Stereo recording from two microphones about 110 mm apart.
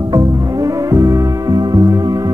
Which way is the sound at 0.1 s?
35° right (ahead or behind).